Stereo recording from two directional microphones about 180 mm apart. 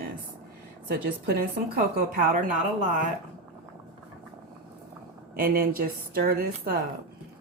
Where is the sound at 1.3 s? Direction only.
55° right (ahead or behind).